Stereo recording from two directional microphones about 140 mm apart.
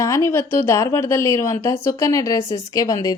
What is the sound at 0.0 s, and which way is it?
Speech, 20° left (ahead or behind).